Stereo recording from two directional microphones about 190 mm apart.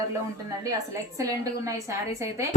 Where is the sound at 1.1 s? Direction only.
15° right (ahead or behind).